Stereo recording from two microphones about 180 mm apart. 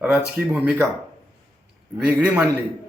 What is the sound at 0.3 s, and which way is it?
Speech, 10° right (ahead or behind).